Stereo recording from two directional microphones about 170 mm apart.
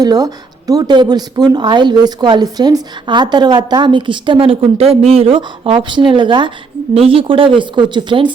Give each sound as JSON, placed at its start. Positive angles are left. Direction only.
{"t": 0.0, "sound": "a woman's voice", "side_deg": -20}